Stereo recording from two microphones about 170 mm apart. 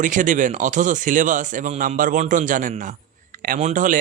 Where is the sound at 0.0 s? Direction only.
50° right (ahead or behind).